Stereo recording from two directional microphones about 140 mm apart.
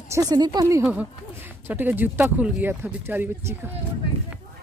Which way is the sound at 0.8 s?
10° right (ahead or behind).